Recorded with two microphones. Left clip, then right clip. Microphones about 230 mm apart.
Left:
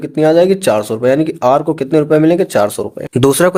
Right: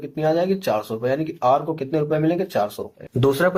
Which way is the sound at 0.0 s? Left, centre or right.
Left.